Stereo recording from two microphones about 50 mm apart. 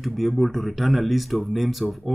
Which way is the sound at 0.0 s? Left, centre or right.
Centre.